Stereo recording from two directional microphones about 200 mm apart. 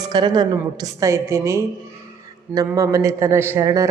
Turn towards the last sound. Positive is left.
turn(degrees=-15)  # may be behind; listen again after turning